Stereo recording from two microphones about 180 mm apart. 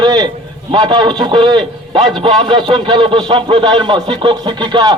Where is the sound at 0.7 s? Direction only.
25° right (ahead or behind).